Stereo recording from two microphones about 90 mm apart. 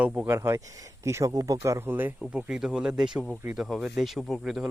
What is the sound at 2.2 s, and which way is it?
Speech, 10° right (ahead or behind).